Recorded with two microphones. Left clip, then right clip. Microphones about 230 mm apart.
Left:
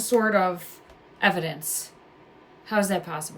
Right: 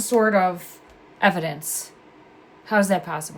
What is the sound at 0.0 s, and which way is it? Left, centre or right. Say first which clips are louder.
A woman's voice: right 3 dB; right.